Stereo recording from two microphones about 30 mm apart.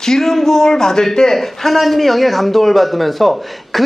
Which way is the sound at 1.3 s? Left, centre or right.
Centre.